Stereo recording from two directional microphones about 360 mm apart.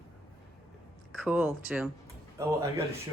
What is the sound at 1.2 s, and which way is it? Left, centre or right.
Speech, centre.